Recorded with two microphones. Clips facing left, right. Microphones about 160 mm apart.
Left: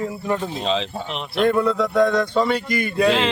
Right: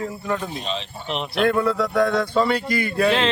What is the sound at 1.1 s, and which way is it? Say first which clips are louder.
A man's voice: left 1 dB; centre (ahead or behind).